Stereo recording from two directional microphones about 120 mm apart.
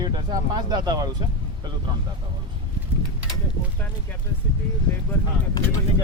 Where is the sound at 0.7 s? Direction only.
35° right (ahead or behind).